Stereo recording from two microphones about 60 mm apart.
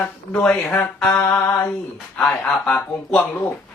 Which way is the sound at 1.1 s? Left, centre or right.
Left.